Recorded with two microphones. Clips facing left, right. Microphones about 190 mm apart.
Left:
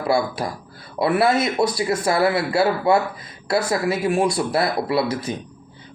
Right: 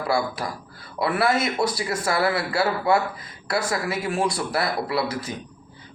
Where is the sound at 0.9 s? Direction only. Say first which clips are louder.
Left 4 dB; 25° left (ahead or behind).